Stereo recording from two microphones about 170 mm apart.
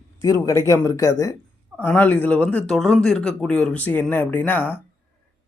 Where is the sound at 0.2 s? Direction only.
20° left (ahead or behind).